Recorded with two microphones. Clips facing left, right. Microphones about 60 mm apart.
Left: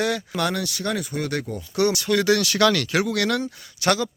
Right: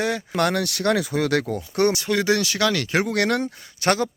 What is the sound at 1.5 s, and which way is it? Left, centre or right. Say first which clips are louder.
Speech: right 1 dB; right.